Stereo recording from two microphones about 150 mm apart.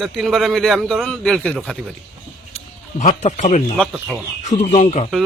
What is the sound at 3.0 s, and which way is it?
Speech, 50° left (ahead or behind).